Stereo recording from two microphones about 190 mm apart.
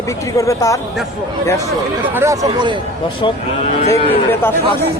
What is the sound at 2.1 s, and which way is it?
Speech, 15° right (ahead or behind).